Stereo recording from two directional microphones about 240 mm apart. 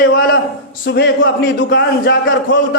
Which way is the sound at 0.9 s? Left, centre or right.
Left.